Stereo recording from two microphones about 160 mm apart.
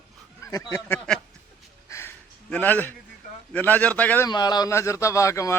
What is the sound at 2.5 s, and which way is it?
A man's voice, 10° left (ahead or behind).